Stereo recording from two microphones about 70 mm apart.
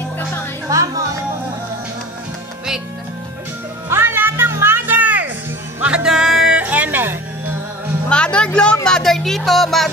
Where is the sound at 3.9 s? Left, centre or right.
Right.